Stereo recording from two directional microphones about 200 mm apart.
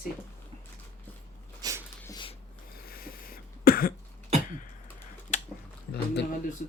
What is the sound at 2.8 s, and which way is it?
Cough, 50° left (ahead or behind).